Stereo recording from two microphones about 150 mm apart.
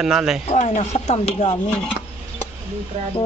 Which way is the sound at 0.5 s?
50° left (ahead or behind).